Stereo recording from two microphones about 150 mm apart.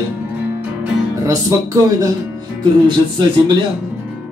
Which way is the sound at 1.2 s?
20° right (ahead or behind).